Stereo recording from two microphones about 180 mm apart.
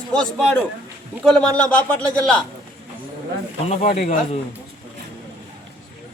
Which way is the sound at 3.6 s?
40° left (ahead or behind).